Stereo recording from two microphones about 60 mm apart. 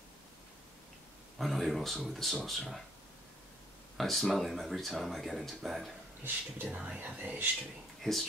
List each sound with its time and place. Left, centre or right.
1.4 s speech: centre
4.0 s speech: centre
6.2 s speech: right
8.0 s speech: centre